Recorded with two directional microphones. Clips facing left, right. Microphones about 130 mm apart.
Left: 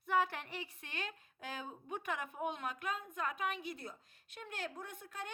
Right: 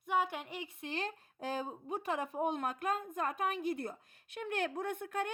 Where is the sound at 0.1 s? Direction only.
15° right (ahead or behind).